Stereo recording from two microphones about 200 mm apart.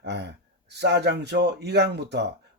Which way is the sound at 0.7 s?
55° right (ahead or behind).